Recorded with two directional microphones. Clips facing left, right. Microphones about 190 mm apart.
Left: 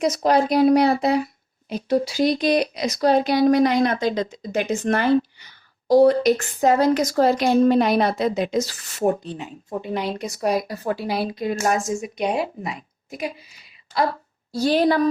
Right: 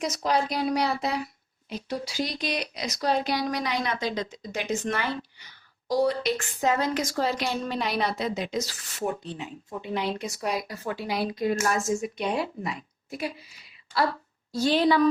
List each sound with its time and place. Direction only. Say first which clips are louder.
0.0 s a woman's voice: left 7 dB; 55° left (ahead or behind); by 11.4 s 30° left (ahead or behind)
11.9 s a woman's voice: left 3 dB; 15° left (ahead or behind)
14.5 s a woman's voice: left 3 dB; 40° left (ahead or behind)